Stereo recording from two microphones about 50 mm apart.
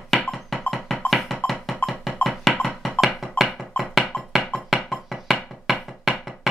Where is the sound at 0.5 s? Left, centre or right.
Centre.